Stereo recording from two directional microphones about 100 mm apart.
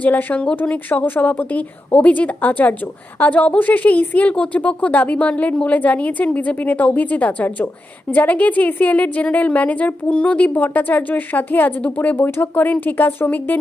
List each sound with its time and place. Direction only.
0.0 s speech: 15° left (ahead or behind)